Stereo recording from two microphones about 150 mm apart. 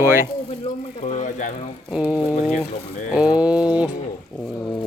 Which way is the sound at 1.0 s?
55° left (ahead or behind).